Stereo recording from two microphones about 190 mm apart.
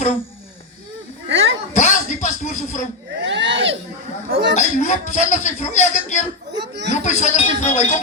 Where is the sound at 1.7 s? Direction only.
40° left (ahead or behind).